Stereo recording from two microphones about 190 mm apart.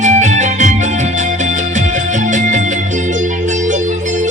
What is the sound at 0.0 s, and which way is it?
Music, 40° right (ahead or behind).